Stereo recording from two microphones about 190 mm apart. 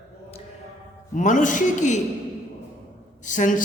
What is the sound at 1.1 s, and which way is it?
Speech, 40° left (ahead or behind).